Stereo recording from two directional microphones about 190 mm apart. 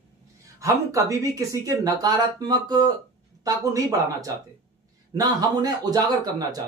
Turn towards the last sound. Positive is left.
turn(degrees=-20)  # may be behind; listen again after turning